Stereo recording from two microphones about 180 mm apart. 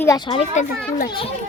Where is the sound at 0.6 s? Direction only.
40° left (ahead or behind).